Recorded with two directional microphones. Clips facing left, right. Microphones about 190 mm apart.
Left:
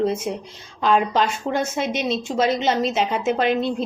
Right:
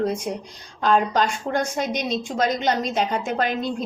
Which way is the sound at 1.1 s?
45° right (ahead or behind).